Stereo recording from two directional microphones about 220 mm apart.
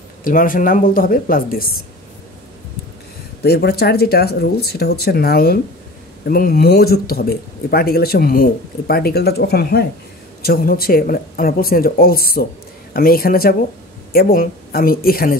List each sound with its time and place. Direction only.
0.2 s speech: 40° left (ahead or behind)
3.4 s speech: 45° left (ahead or behind)